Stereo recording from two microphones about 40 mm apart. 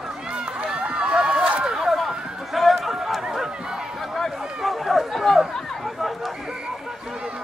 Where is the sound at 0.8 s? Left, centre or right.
Right.